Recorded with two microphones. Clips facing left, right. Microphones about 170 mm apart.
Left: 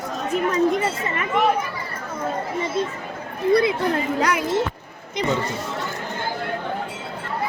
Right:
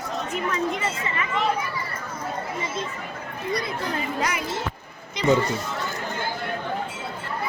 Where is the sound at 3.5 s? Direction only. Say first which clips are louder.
Left 11 dB; 55° left (ahead or behind).